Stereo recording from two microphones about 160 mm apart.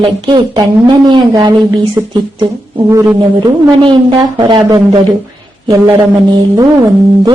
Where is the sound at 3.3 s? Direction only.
30° right (ahead or behind).